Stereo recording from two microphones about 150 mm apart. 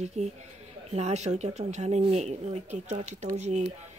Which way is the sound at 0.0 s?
50° right (ahead or behind).